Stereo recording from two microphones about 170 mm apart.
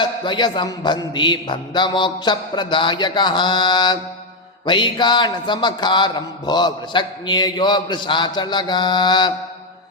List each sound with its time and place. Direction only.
0.0 s speech: 25° left (ahead or behind)